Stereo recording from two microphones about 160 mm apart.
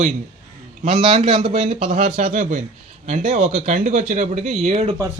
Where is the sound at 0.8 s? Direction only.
45° right (ahead or behind).